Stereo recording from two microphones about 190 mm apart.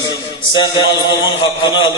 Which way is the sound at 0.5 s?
25° left (ahead or behind).